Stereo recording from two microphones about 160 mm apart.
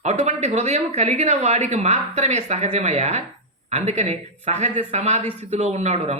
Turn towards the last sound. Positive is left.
turn(degrees=-45)  # may be behind; listen again after turning